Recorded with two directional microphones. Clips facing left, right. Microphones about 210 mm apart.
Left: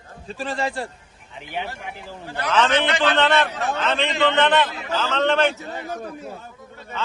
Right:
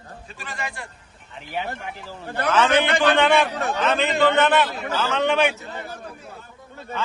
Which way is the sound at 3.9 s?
5° right (ahead or behind).